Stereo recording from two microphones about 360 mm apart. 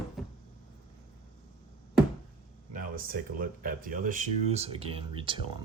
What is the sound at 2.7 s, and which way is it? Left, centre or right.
Speech, right.